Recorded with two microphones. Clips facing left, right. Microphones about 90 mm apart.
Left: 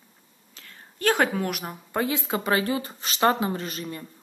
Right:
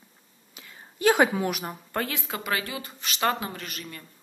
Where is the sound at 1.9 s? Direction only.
20° left (ahead or behind).